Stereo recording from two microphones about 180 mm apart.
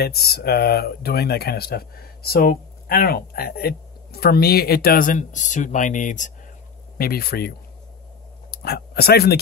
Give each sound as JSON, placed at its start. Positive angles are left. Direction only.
{"t": 0.0, "sound": "speech", "side_deg": 60}
{"t": 7.0, "sound": "speech", "side_deg": 55}